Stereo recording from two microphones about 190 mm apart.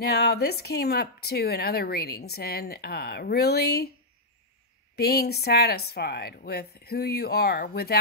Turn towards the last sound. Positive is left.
turn(degrees=55)  # may be behind; listen again after turning